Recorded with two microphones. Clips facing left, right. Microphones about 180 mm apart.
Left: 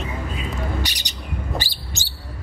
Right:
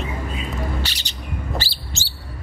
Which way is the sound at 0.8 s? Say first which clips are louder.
Left 2 dB; 15° left (ahead or behind).